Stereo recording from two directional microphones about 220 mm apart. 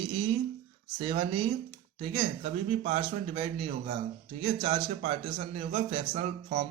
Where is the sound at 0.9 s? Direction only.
25° right (ahead or behind).